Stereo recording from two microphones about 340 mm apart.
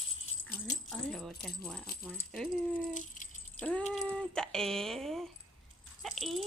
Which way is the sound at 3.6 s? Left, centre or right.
Centre.